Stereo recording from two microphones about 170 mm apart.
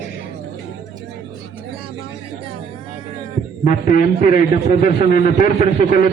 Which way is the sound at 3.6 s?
50° left (ahead or behind).